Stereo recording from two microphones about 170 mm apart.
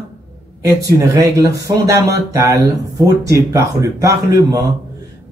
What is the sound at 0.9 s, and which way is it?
A man's voice, 20° right (ahead or behind).